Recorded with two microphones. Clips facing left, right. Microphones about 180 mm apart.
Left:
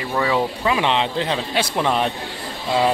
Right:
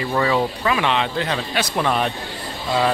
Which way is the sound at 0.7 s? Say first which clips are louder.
Left 2 dB; 25° left (ahead or behind).